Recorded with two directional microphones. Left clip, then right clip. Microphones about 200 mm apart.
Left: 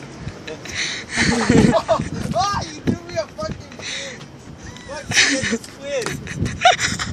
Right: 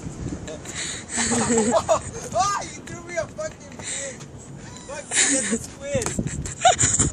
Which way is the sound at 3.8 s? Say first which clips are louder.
Left 4 dB; 15° right (ahead or behind).